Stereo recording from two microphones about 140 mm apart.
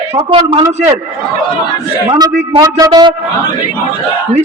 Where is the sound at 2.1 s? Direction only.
25° right (ahead or behind).